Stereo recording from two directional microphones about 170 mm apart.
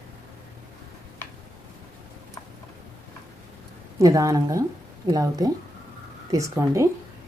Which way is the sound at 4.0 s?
20° right (ahead or behind).